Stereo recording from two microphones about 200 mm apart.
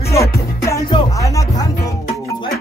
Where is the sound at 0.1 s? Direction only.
15° left (ahead or behind).